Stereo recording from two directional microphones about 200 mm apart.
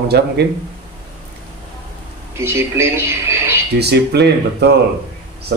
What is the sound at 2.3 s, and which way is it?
Speech, 15° right (ahead or behind).